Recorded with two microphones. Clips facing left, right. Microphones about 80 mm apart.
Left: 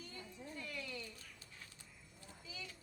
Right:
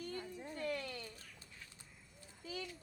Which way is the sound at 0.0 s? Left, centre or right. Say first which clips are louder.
Right 7 dB; right.